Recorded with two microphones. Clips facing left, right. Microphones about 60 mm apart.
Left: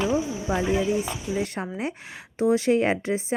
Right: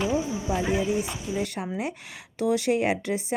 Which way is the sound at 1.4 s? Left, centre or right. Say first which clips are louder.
Left 1 dB; left.